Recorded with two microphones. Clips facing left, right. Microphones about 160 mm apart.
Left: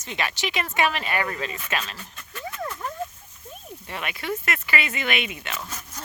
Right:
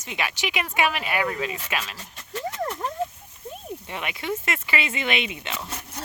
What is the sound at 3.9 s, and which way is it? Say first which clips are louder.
Speech: even; 20° right (ahead or behind).